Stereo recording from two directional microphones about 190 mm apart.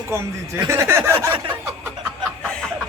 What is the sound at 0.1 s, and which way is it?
Speech, 15° right (ahead or behind).